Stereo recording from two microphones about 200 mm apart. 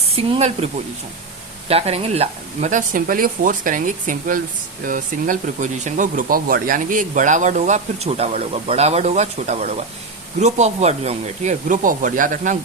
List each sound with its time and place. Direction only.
0.2 s speech: 30° right (ahead or behind)